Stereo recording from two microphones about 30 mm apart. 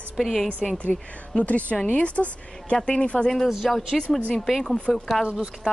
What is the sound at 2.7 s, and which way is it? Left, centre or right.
Speech, left.